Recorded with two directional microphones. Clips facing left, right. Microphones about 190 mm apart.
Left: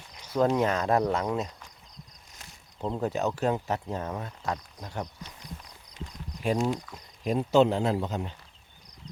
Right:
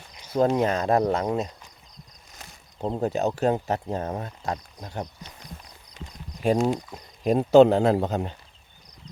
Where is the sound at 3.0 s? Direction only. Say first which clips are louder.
Right 4 dB; 30° right (ahead or behind).